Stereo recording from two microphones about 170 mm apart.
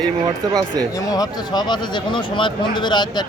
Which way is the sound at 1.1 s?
25° left (ahead or behind).